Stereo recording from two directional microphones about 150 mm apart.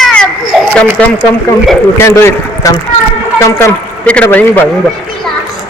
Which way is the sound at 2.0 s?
20° left (ahead or behind).